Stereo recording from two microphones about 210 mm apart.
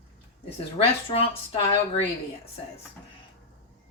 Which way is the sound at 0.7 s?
25° left (ahead or behind).